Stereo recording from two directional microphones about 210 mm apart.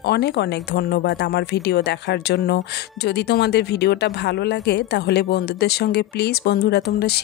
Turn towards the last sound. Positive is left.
turn(degrees=50)  # may be behind; listen again after turning